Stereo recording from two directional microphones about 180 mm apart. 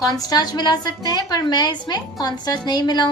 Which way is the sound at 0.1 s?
20° left (ahead or behind).